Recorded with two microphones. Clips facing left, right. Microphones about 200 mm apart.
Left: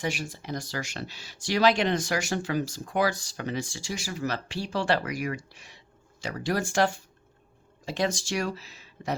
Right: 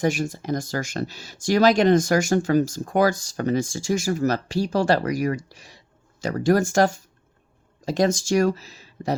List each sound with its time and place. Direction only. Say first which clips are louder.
0.0 s speech: right 9 dB; 45° right (ahead or behind)